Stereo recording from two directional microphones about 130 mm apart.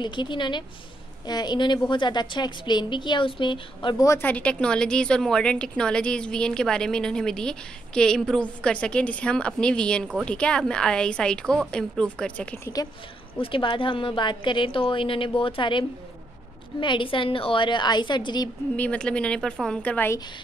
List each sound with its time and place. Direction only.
0.0 s a woman's voice: 35° left (ahead or behind)
4.0 s speech: 20° left (ahead or behind)
13.4 s a woman's voice: 40° left (ahead or behind)
16.8 s a woman's voice: 40° left (ahead or behind)
18.8 s speech: 10° left (ahead or behind)